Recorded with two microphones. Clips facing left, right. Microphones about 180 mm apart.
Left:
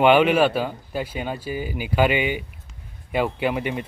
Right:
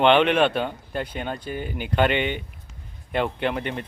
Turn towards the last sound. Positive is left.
turn(degrees=5)  # may be behind; listen again after turning